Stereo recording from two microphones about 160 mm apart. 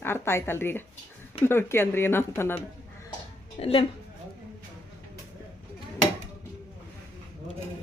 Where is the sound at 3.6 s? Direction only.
35° left (ahead or behind).